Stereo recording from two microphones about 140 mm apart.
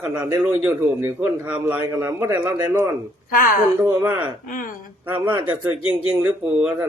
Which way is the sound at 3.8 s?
20° right (ahead or behind).